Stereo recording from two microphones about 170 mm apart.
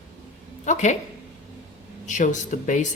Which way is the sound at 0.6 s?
45° left (ahead or behind).